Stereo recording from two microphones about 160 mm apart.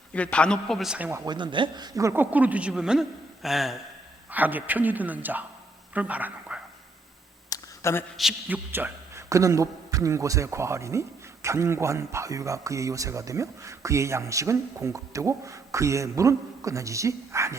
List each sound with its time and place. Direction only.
0.1 s a man's voice: 10° left (ahead or behind); by 1.2 s 10° right (ahead or behind)
1.2 s a woman's voice: 30° right (ahead or behind); by 6.6 s 10° right (ahead or behind)
7.5 s a sound: 15° left (ahead or behind)
8.1 s speech: 5° right (ahead or behind); by 17.6 s 20° right (ahead or behind)